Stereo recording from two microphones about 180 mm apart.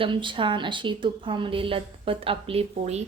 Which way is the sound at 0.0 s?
25° right (ahead or behind).